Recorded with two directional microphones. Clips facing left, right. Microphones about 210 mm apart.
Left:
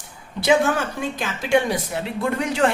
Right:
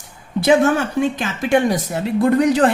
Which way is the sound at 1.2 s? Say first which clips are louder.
Left 1 dB; 50° right (ahead or behind).